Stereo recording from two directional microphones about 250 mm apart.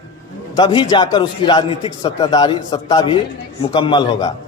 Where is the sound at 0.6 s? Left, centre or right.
Centre.